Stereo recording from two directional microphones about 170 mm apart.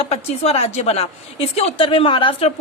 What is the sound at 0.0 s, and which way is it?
A woman's voice, 40° left (ahead or behind).